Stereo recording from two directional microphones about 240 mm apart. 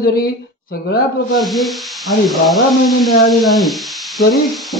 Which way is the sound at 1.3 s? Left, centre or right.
Centre.